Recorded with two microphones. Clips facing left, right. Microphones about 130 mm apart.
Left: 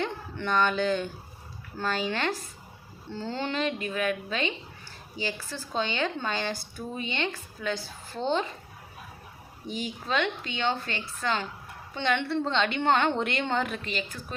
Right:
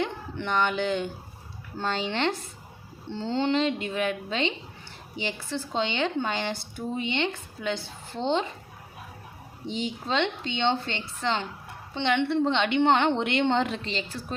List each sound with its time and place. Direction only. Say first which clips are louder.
0.0 s speech: right 1 dB; 15° right (ahead or behind)
9.6 s speech: right 2 dB; 25° right (ahead or behind)